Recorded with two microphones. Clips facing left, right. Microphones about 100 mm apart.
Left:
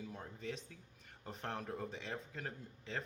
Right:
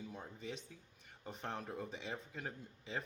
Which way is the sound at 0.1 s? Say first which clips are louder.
Left 1 dB; centre (ahead or behind).